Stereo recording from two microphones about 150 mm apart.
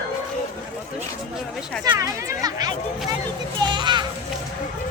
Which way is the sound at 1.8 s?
25° right (ahead or behind).